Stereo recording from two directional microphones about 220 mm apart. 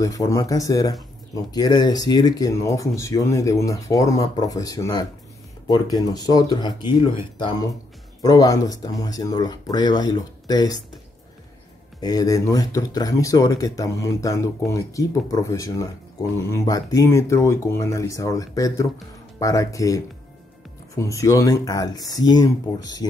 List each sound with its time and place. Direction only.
0.0 s speech: 15° left (ahead or behind)
12.0 s speech: 15° left (ahead or behind)